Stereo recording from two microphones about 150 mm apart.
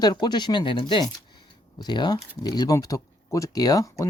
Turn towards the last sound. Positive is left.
turn(degrees=25)  # may be behind; listen again after turning